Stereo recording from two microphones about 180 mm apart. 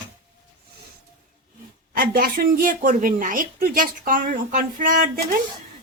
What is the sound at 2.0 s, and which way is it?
Speech, 55° right (ahead or behind).